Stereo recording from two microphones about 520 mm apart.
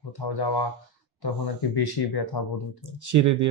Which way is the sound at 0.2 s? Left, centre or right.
Left.